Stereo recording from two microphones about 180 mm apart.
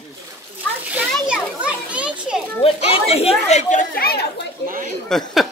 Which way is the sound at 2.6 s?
30° left (ahead or behind).